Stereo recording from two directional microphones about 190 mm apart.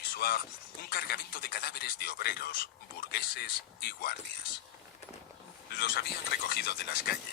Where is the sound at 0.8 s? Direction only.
50° left (ahead or behind).